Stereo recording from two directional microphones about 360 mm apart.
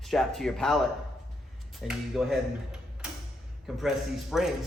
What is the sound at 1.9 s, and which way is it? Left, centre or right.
Mechanisms, centre.